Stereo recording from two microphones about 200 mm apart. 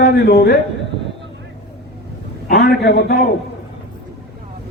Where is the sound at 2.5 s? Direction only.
60° left (ahead or behind).